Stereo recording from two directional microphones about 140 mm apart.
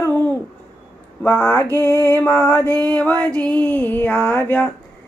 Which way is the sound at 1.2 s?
15° left (ahead or behind).